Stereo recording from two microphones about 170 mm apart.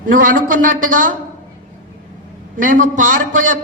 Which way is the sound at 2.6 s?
50° right (ahead or behind).